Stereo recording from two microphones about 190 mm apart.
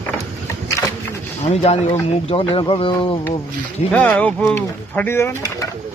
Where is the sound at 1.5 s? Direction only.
30° left (ahead or behind).